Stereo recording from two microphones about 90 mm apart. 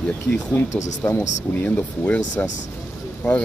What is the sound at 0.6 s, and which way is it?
Speech, 25° left (ahead or behind).